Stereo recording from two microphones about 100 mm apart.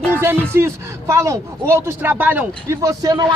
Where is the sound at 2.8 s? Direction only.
40° right (ahead or behind).